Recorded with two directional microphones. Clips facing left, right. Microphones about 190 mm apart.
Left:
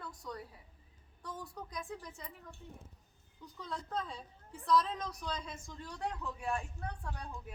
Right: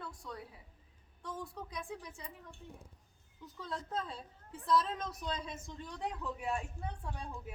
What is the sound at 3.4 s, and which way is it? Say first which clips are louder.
A woman's voice: right 1 dB; centre (ahead or behind).